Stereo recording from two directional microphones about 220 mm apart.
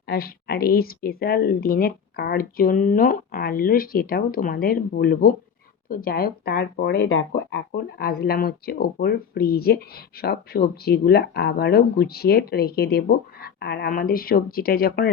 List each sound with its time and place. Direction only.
0.0 s speech: 45° left (ahead or behind)